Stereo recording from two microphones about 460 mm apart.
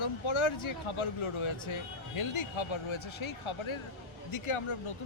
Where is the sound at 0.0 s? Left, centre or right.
Left.